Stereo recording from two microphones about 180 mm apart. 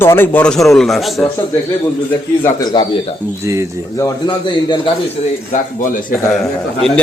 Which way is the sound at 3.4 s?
15° right (ahead or behind).